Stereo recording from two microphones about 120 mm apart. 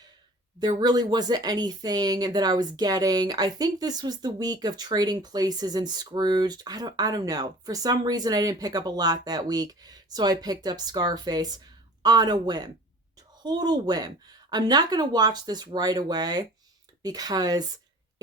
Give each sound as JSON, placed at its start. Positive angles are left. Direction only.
{"t": 0.6, "sound": "speech", "side_deg": -35}